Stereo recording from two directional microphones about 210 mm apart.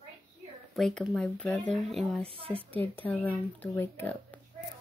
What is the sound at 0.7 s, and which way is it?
Speech, centre (ahead or behind).